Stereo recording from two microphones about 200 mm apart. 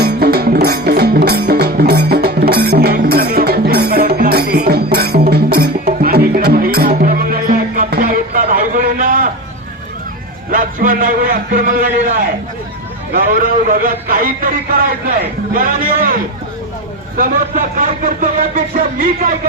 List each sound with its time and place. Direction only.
0.0 s music: 50° right (ahead or behind)
7.8 s a sound: 45° right (ahead or behind)
10.5 s speech: 45° right (ahead or behind)
13.1 s speech: 45° right (ahead or behind)